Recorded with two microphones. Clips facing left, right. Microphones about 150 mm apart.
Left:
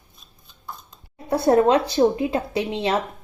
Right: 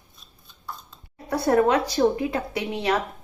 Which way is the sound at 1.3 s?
25° left (ahead or behind).